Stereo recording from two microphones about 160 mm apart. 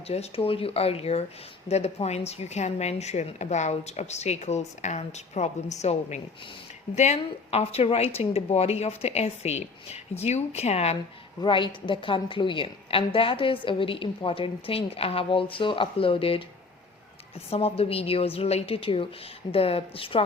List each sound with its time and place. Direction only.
0.1 s a woman's voice: 40° left (ahead or behind)
11.3 s a woman's voice: 30° left (ahead or behind)
17.5 s a woman's voice: 35° left (ahead or behind)